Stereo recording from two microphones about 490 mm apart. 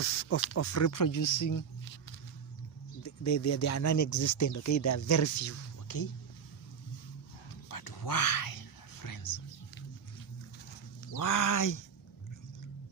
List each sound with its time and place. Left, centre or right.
0.0 s speech: left
3.0 s speech: left
7.7 s whispering: left
11.1 s speech: left